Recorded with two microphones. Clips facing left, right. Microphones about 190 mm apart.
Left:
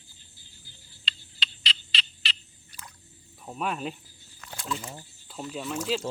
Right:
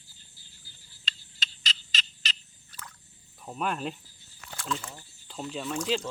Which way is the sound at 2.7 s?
15° left (ahead or behind).